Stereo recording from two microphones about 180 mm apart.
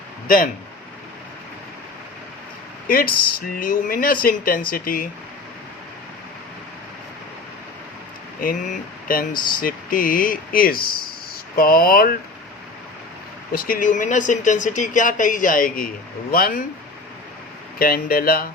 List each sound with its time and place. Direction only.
0.3 s speech: 50° left (ahead or behind)
2.8 s speech: 55° left (ahead or behind)
8.4 s speech: 50° left (ahead or behind)
13.5 s speech: 55° left (ahead or behind)
17.7 s speech: 55° left (ahead or behind)